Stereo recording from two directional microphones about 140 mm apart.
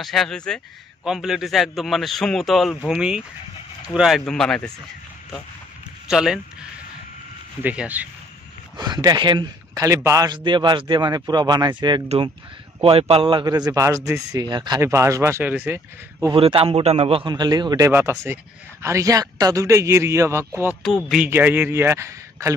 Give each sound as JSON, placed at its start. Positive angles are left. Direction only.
{"t": 0.0, "sound": "speech", "side_deg": 0}
{"t": 6.0, "sound": "speech", "side_deg": -5}
{"t": 7.6, "sound": "a man's voice", "side_deg": -10}
{"t": 8.7, "sound": "speech", "side_deg": -30}
{"t": 9.8, "sound": "a man's voice", "side_deg": -20}
{"t": 12.8, "sound": "speech", "side_deg": -40}
{"t": 16.3, "sound": "a man's voice", "side_deg": -40}
{"t": 17.3, "sound": "speech", "side_deg": -30}
{"t": 20.8, "sound": "speech", "side_deg": 0}
{"t": 21.3, "sound": "a man's voice", "side_deg": -15}